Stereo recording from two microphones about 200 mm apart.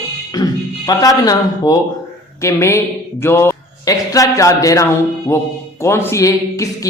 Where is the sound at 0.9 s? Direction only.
20° left (ahead or behind).